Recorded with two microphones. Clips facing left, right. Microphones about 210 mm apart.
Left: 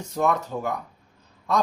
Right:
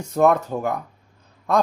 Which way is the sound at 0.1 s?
55° right (ahead or behind).